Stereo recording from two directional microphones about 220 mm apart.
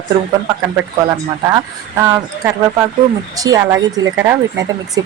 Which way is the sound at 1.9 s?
15° right (ahead or behind).